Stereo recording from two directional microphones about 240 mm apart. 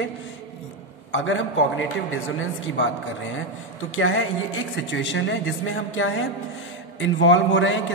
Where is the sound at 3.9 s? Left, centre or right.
Left.